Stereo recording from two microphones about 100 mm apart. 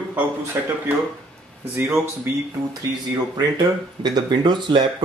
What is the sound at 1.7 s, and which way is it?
Speech, 20° right (ahead or behind).